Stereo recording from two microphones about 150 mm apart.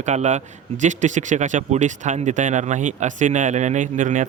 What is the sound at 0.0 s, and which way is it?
A man's voice, 50° right (ahead or behind).